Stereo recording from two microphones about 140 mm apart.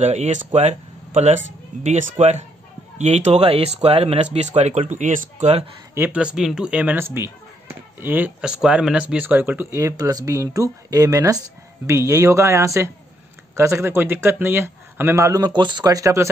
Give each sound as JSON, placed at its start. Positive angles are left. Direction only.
{"t": 0.0, "sound": "speech", "side_deg": -55}
{"t": 5.9, "sound": "speech", "side_deg": -10}